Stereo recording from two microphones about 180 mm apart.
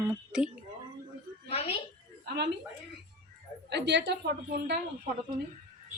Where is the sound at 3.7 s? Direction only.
70° right (ahead or behind).